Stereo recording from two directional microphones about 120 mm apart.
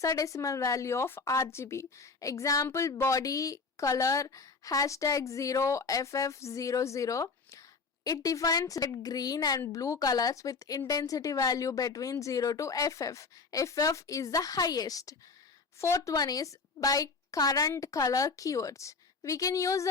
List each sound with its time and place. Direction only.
0.0 s a woman's voice: 25° left (ahead or behind)